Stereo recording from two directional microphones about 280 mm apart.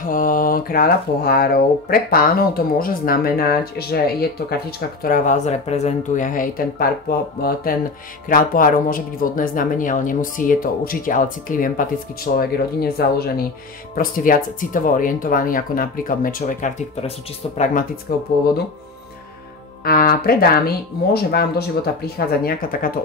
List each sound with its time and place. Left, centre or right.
0.0 s speech: left
19.8 s speech: left